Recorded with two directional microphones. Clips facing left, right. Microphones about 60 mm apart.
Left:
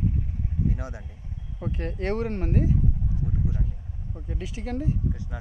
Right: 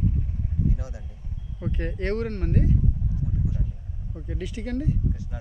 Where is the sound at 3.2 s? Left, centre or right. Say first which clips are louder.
Left 1 dB; left.